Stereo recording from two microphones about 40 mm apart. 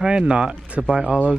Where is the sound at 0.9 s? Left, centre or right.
Centre.